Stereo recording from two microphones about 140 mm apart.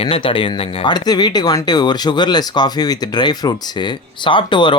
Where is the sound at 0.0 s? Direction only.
40° left (ahead or behind).